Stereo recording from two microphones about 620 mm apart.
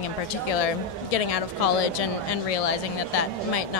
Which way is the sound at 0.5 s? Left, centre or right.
Left.